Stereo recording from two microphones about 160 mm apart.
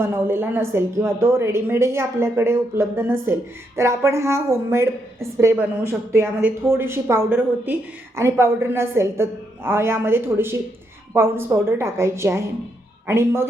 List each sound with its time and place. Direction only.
0.0 s a woman's voice: 15° right (ahead or behind)